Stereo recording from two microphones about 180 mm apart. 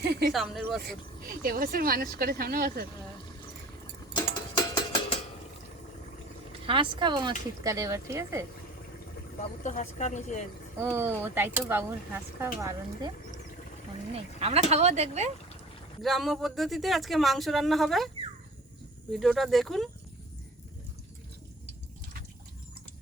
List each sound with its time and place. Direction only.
0.0 s a sound: 65° right (ahead or behind)
0.3 s speech: centre (ahead or behind)
0.8 s speech: 55° right (ahead or behind)
4.5 s a sound: 30° left (ahead or behind)
6.7 s speech: 25° right (ahead or behind)
9.4 s speech: 40° left (ahead or behind)
10.8 s speech: 10° right (ahead or behind)
14.1 s speech: 35° right (ahead or behind)
16.0 s speech: centre (ahead or behind)
19.1 s speech: centre (ahead or behind)